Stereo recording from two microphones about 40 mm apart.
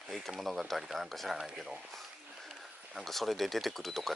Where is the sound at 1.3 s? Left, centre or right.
Centre.